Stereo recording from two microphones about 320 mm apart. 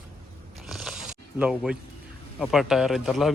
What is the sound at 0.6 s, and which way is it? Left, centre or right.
Biting, centre.